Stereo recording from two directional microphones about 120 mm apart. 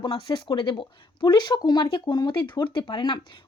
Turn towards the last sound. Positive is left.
turn(degrees=40)  # may be behind; listen again after turning